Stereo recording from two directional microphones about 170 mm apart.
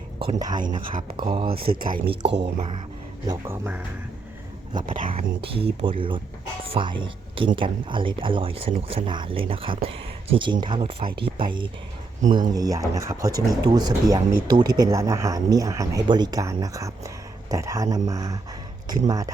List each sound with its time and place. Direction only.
0.3 s speech: 20° right (ahead or behind)
0.6 s speech: 55° right (ahead or behind)
2.2 s speech: 35° right (ahead or behind)
3.2 s speech: 15° right (ahead or behind)
4.7 s speech: 25° right (ahead or behind)
4.9 s speech: 50° right (ahead or behind)
5.4 s speech: 35° right (ahead or behind)